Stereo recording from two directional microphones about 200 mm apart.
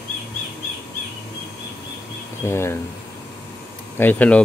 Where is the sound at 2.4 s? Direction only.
10° left (ahead or behind).